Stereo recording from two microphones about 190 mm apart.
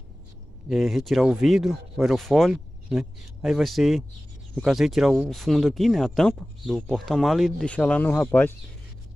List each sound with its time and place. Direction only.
0.7 s speech: centre (ahead or behind)